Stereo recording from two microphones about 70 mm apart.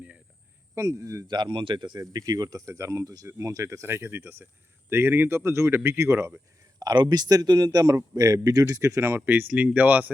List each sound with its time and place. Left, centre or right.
0.8 s speech: right
1.3 s speech: right
2.0 s speech: right
3.3 s speech: right
6.7 s speech: right
8.1 s speech: right
9.2 s speech: right